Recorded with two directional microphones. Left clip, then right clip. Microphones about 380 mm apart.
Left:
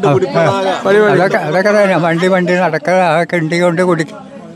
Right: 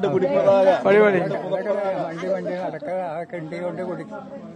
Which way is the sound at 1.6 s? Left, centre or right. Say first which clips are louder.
Left 15 dB; left.